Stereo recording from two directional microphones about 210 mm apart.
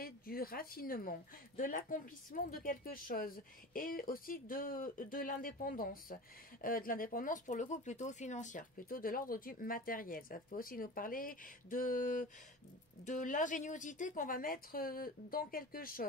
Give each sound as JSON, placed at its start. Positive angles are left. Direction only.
{"t": 0.0, "sound": "speech", "side_deg": 45}